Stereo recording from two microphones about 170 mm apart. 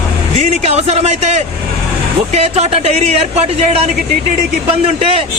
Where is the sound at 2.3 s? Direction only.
40° right (ahead or behind).